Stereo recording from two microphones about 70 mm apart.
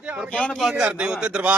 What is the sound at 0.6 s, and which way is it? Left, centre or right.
Speech, centre.